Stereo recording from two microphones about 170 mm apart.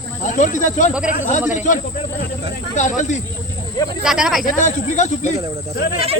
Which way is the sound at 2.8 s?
45° left (ahead or behind).